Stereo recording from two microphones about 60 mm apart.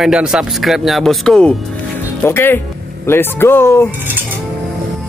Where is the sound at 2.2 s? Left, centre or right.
Left.